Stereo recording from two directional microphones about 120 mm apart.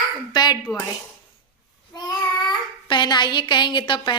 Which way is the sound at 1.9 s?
35° left (ahead or behind).